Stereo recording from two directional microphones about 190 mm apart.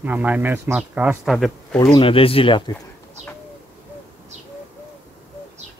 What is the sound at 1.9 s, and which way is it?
Speech, 30° left (ahead or behind).